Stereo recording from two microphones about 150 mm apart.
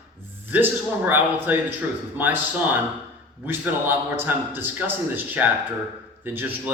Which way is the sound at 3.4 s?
15° right (ahead or behind).